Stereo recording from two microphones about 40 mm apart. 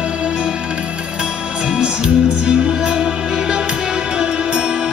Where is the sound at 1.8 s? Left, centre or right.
Right.